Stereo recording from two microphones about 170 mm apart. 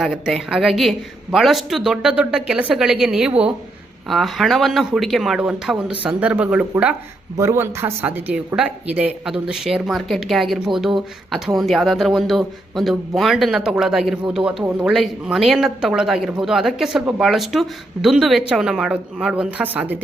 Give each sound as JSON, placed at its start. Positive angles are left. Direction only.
{"t": 0.0, "sound": "speech", "side_deg": 0}